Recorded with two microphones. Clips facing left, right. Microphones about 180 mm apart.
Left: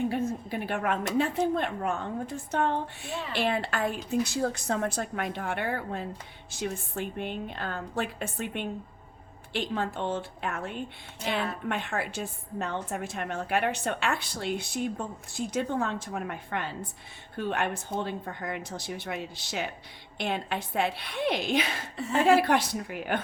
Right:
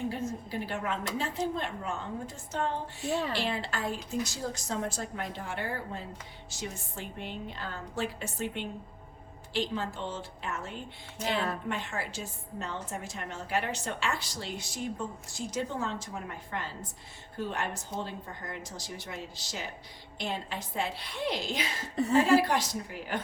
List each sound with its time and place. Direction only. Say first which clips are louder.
0.1 s a woman's voice: left 5 dB; 60° left (ahead or behind)
3.1 s speech: right 8 dB; 35° right (ahead or behind)
3.3 s a woman's voice: left 4 dB; 60° left (ahead or behind)